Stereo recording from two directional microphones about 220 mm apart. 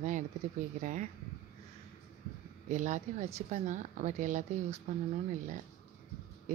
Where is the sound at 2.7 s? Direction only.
35° right (ahead or behind).